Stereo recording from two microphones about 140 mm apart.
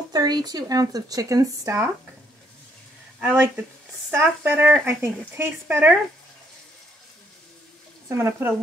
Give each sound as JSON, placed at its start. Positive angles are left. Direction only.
{"t": 0.1, "sound": "speech", "side_deg": -30}
{"t": 3.2, "sound": "speech", "side_deg": -15}
{"t": 8.1, "sound": "speech", "side_deg": -15}